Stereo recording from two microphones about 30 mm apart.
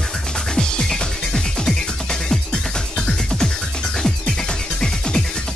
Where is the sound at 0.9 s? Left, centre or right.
Centre.